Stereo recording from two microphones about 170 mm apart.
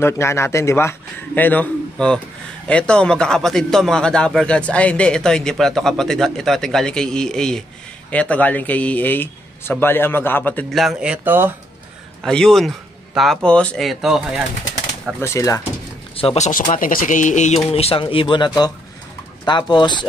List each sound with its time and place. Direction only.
0.0 s speech: 15° left (ahead or behind); by 11.5 s 10° right (ahead or behind)
12.2 s speech: 5° left (ahead or behind)
15.1 s speech: 15° left (ahead or behind)
16.2 s speech: 40° left (ahead or behind)
17.7 s speech: 35° left (ahead or behind)